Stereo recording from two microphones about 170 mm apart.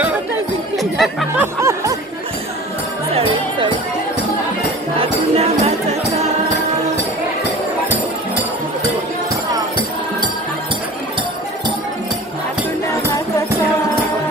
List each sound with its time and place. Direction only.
0.7 s chatter: centre (ahead or behind)
1.4 s music: 15° right (ahead or behind)
3.2 s music: 30° right (ahead or behind)
5.0 s music: 35° right (ahead or behind)